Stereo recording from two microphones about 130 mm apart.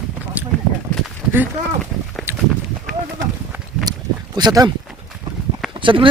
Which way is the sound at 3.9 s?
30° right (ahead or behind).